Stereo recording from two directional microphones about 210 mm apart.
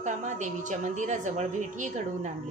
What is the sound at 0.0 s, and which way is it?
A woman's voice, 35° right (ahead or behind).